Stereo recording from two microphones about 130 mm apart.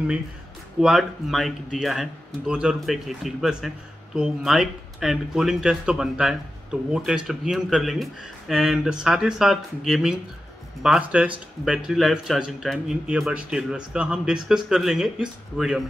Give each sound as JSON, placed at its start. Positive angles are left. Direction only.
{"t": 0.7, "sound": "speech", "side_deg": -5}